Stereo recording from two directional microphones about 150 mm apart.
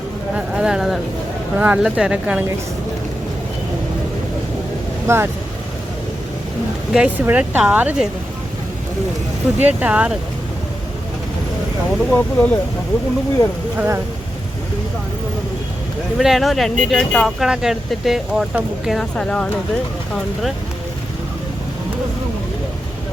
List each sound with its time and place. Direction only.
0.3 s speech: 5° right (ahead or behind)
5.0 s speech: 15° right (ahead or behind)
6.9 s speech: 10° right (ahead or behind)
9.6 s speech: 10° right (ahead or behind)
11.9 s speech: 10° left (ahead or behind)
13.7 s speech: 15° right (ahead or behind)
16.1 s speech: centre (ahead or behind)